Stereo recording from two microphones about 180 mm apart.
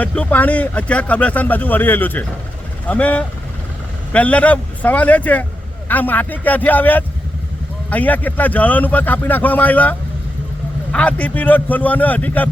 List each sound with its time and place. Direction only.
0.0 s speech: 5° left (ahead or behind)
10.9 s speech: 5° left (ahead or behind)